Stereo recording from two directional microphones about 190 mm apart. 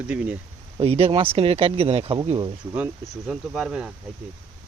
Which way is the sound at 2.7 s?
5° right (ahead or behind).